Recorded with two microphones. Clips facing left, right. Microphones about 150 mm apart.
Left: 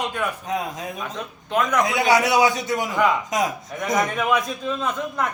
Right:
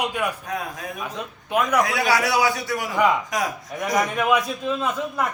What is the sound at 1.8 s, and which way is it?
Speech, 20° left (ahead or behind).